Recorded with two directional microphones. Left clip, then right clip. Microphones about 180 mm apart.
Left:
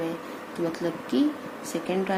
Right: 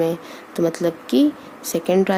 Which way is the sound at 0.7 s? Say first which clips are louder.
Right 8 dB; 55° right (ahead or behind).